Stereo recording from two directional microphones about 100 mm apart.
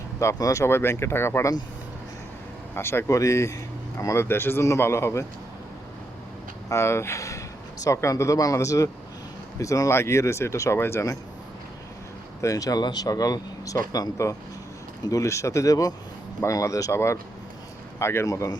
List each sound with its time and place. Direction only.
0.2 s speech: 30° left (ahead or behind)
2.7 s speech: 25° left (ahead or behind)
6.7 s speech: 25° left (ahead or behind)
12.4 s speech: 35° left (ahead or behind)